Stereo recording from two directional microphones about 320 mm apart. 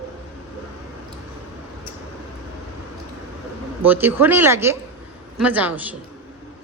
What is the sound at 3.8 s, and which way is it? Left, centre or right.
A woman's voice, centre.